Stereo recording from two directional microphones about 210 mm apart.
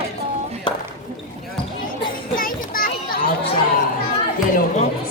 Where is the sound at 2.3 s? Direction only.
40° left (ahead or behind).